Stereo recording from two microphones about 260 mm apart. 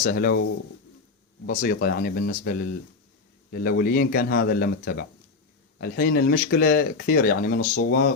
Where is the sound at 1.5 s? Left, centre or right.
Left.